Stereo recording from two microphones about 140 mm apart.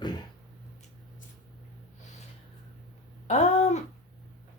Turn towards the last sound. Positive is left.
turn(degrees=55)  # may be behind; listen again after turning